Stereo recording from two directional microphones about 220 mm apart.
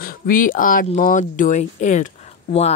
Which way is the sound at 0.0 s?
40° left (ahead or behind).